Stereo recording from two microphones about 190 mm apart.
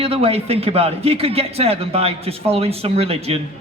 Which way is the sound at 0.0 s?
30° right (ahead or behind).